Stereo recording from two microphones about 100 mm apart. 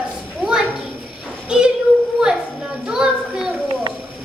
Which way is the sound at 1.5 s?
10° right (ahead or behind).